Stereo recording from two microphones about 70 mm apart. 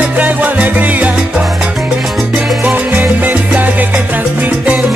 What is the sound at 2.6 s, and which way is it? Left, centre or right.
Salsa music, right.